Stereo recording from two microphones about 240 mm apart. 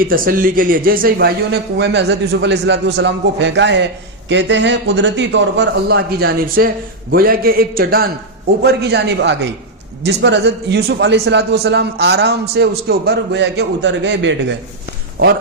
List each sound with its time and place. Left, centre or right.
0.0 s a man's voice: right